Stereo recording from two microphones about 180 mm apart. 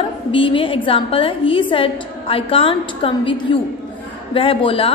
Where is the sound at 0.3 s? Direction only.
30° left (ahead or behind).